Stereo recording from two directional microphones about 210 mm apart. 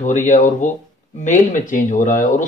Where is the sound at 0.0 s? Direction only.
35° left (ahead or behind).